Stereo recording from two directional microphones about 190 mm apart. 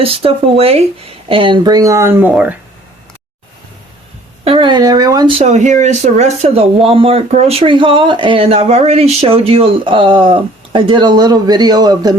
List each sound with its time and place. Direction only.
0.0 s speech: 30° right (ahead or behind); by 2.6 s 10° right (ahead or behind)
4.4 s speech: 25° right (ahead or behind)